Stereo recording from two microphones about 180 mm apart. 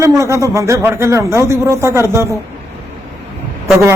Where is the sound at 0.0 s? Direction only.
15° right (ahead or behind).